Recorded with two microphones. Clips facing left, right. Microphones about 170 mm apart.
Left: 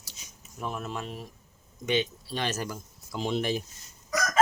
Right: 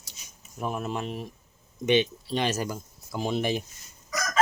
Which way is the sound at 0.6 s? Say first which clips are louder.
Right 4 dB; 15° right (ahead or behind).